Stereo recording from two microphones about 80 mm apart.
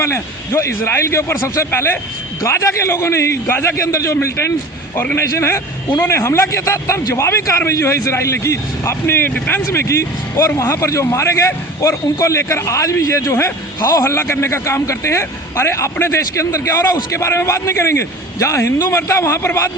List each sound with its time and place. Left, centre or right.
0.0 s speech: left